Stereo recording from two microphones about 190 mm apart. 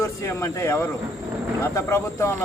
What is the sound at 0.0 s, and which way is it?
Speech, 15° left (ahead or behind).